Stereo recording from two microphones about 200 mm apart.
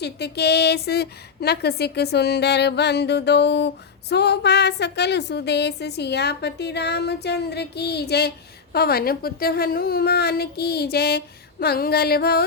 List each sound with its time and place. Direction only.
0.0 s a woman's voice: 55° left (ahead or behind)